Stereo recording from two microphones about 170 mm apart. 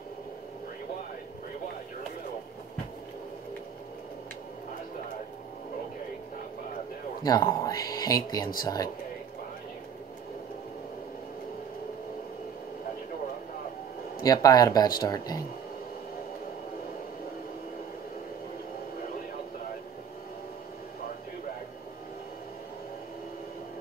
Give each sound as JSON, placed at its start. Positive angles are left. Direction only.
{"t": 7.2, "sound": "speech", "side_deg": 20}
{"t": 14.2, "sound": "speech", "side_deg": 20}